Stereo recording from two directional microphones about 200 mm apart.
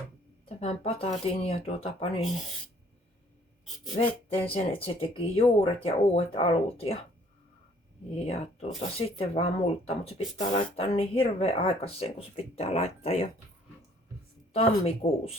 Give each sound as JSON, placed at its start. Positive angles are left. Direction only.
{"t": 0.4, "sound": "speech", "side_deg": 30}
{"t": 3.9, "sound": "speech", "side_deg": 30}
{"t": 8.2, "sound": "speech", "side_deg": 30}
{"t": 14.5, "sound": "speech", "side_deg": 30}